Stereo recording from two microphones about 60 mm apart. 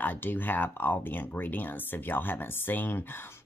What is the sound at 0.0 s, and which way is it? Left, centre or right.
Speech, left.